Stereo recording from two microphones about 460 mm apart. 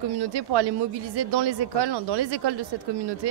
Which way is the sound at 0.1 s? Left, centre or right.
Right.